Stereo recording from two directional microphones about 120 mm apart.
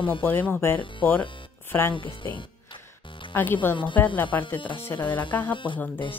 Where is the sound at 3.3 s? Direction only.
15° left (ahead or behind).